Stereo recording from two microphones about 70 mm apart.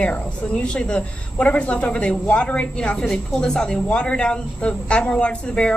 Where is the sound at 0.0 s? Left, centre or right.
Centre.